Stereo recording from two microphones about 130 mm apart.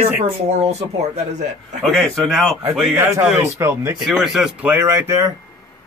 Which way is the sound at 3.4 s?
20° right (ahead or behind).